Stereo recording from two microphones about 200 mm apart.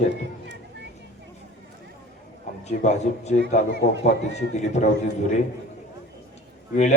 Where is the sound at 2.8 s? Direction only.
35° left (ahead or behind).